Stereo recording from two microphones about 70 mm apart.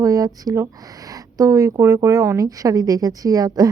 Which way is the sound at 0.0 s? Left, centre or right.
Right.